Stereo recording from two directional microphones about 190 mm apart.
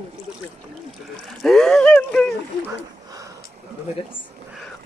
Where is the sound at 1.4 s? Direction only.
Centre (ahead or behind).